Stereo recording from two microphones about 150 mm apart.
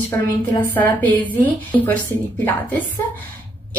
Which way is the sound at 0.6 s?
10° left (ahead or behind).